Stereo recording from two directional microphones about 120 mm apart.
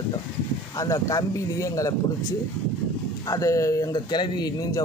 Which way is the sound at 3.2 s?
30° left (ahead or behind).